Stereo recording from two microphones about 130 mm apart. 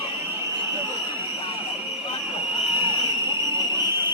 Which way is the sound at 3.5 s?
35° left (ahead or behind).